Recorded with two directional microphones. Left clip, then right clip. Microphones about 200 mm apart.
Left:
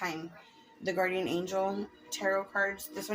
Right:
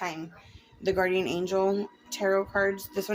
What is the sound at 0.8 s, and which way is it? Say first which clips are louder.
Speech: right 5 dB; 65° right (ahead or behind).